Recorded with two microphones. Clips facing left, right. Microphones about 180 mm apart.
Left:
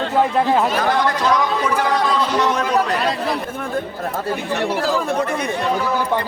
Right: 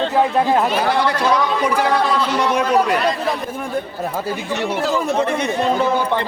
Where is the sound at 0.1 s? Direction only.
5° right (ahead or behind).